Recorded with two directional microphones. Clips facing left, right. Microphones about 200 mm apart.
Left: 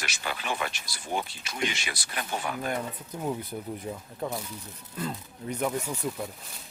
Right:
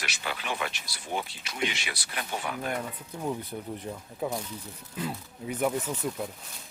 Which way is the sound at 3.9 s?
10° left (ahead or behind).